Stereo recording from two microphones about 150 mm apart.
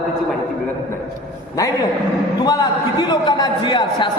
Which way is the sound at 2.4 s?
30° left (ahead or behind).